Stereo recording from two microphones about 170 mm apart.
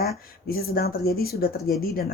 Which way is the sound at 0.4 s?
65° left (ahead or behind).